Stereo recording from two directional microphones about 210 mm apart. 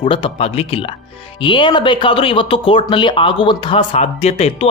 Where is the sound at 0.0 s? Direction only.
25° left (ahead or behind).